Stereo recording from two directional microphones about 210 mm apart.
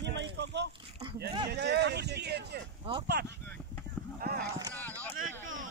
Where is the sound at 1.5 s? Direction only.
50° right (ahead or behind).